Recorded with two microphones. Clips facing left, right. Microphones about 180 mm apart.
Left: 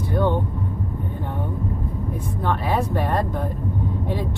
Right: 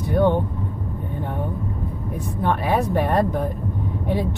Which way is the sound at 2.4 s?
15° right (ahead or behind).